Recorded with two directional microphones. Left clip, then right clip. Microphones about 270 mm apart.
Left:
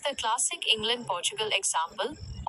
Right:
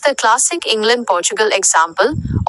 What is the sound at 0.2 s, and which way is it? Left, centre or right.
Speech, right.